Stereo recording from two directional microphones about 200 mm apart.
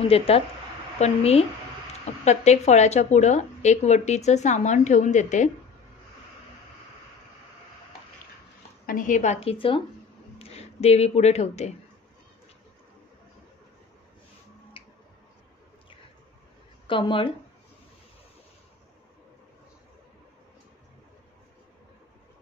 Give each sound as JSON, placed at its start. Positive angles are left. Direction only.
{"t": 0.1, "sound": "speech", "side_deg": 30}
{"t": 8.8, "sound": "speech", "side_deg": 40}
{"t": 16.8, "sound": "speech", "side_deg": 25}